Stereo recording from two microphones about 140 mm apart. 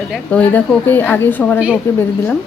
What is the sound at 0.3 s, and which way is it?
Speech, 10° left (ahead or behind).